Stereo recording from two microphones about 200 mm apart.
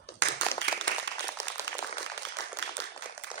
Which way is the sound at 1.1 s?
65° right (ahead or behind).